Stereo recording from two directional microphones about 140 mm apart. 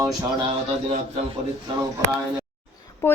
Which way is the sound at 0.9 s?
55° right (ahead or behind).